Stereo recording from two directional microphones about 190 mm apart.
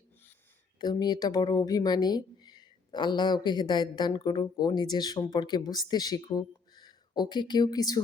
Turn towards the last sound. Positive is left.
turn(degrees=20)  # may be behind; listen again after turning